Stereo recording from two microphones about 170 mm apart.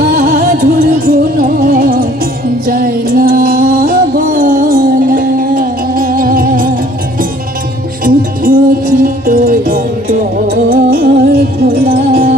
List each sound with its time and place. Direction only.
0.0 s music: 65° right (ahead or behind)
8.0 s music: 55° right (ahead or behind)